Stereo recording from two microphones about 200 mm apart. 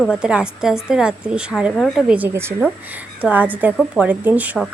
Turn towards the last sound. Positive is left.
turn(degrees=-5)  # may be behind; listen again after turning